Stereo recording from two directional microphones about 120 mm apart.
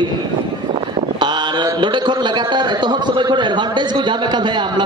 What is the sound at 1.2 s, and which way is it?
A man's voice, 40° right (ahead or behind).